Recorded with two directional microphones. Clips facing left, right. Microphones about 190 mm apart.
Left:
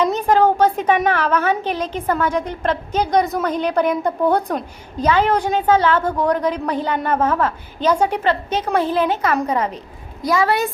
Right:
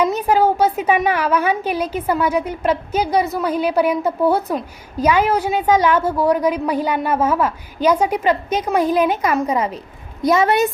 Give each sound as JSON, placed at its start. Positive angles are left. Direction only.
{"t": 0.0, "sound": "a woman's voice", "side_deg": -10}
{"t": 10.2, "sound": "a woman's voice", "side_deg": -20}